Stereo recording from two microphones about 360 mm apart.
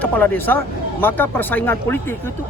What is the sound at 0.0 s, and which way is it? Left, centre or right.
Speech, centre.